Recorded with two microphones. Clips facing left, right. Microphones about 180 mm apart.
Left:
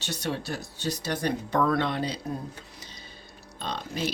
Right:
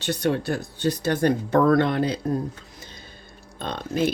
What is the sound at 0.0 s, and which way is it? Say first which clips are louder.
Speech: right 8 dB; 55° right (ahead or behind).